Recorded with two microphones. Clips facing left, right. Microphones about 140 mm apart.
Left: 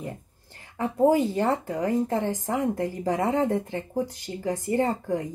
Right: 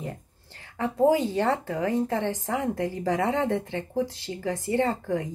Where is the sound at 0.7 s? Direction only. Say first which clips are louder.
Left 1 dB; 15° left (ahead or behind).